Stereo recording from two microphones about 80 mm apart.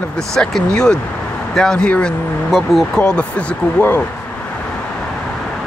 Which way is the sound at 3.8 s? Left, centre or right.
Left.